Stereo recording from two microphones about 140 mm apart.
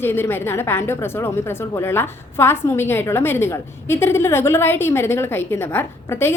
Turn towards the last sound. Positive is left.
turn(degrees=15)  # may be behind; listen again after turning